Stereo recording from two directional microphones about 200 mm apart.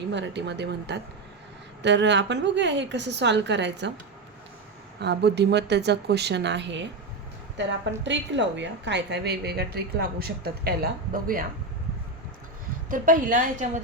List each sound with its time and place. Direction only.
0.1 s a woman's voice: 60° right (ahead or behind)
4.9 s a woman's voice: 55° right (ahead or behind)
8.0 s a woman's voice: 65° right (ahead or behind); by 11.4 s 45° right (ahead or behind)
12.9 s a woman's voice: 40° right (ahead or behind)